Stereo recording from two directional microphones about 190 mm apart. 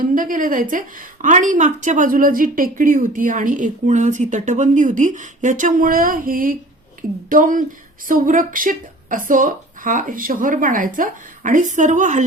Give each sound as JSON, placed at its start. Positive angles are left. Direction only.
{"t": 0.0, "sound": "a woman's voice", "side_deg": -45}